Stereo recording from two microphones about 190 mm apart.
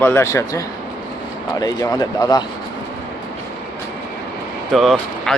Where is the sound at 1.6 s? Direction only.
20° left (ahead or behind).